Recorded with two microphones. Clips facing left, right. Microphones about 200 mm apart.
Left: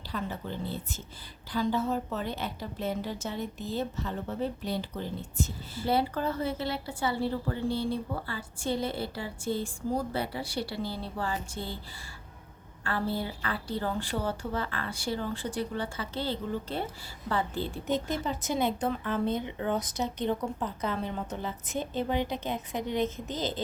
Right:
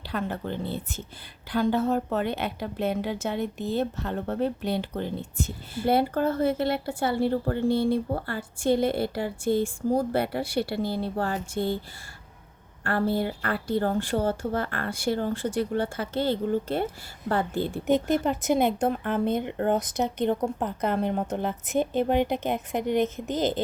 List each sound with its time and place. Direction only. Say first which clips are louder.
0.1 s a woman's voice: right 5 dB; 60° right (ahead or behind)
13.1 s a woman's voice: right 6 dB; 60° right (ahead or behind)